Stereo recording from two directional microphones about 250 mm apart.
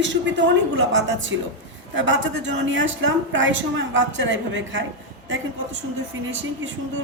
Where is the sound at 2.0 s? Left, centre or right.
Right.